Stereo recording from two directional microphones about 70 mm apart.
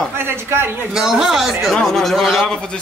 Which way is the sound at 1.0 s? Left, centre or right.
Centre.